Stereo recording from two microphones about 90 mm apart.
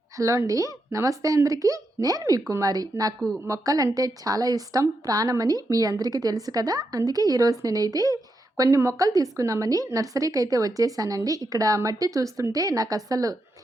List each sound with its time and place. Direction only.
0.2 s a woman's voice: 35° right (ahead or behind)